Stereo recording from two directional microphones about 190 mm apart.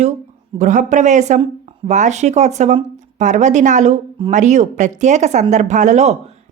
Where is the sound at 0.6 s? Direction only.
40° right (ahead or behind).